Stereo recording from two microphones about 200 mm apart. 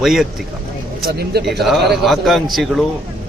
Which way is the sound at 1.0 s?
55° right (ahead or behind).